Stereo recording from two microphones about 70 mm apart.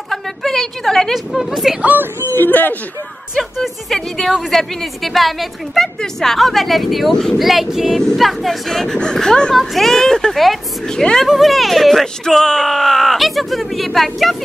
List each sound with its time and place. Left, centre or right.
0.1 s a woman's voice: centre
1.8 s speech: right
2.3 s speech: left
3.3 s speech: centre